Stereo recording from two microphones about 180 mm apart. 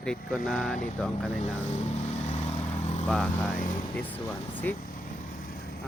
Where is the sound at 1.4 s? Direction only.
40° left (ahead or behind).